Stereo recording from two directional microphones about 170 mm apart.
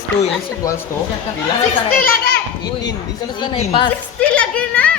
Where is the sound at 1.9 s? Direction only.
55° left (ahead or behind).